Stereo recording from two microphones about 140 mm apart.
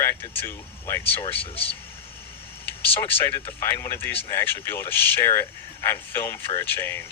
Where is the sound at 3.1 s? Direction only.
15° left (ahead or behind).